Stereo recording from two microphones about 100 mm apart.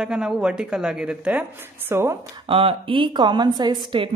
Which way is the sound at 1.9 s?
25° right (ahead or behind).